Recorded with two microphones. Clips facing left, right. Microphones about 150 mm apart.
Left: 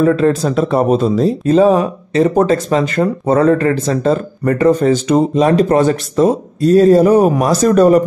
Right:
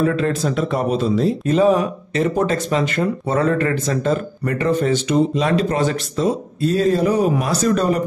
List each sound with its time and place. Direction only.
0.0 s speech: 40° left (ahead or behind)